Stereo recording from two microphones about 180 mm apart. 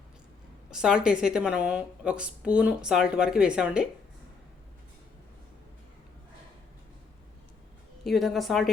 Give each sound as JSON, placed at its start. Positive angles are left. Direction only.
{"t": 0.7, "sound": "a woman's voice", "side_deg": -5}
{"t": 8.0, "sound": "a woman's voice", "side_deg": 0}